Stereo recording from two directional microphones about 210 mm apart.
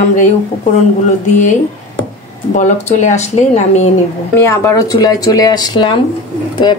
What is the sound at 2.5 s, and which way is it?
Speech, 35° left (ahead or behind).